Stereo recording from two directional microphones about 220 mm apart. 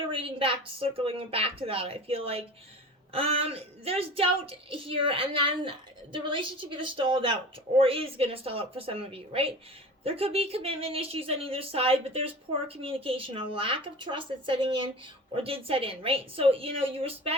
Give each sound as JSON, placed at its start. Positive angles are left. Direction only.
{"t": 0.1, "sound": "speech", "side_deg": -25}